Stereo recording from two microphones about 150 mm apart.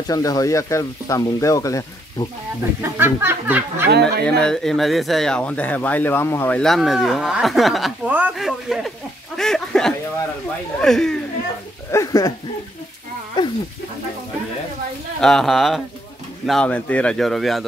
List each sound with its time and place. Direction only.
0.1 s speech: 25° left (ahead or behind)
2.8 s speech: 15° right (ahead or behind)
4.4 s speech: 5° left (ahead or behind)
6.6 s speech: centre (ahead or behind)
8.1 s speech: 10° right (ahead or behind)
11.9 s speech: 20° left (ahead or behind)
13.4 s a sound: 30° left (ahead or behind)
15.1 s speech: 5° left (ahead or behind)